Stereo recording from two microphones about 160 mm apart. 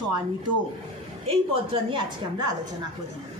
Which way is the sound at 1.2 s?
35° right (ahead or behind).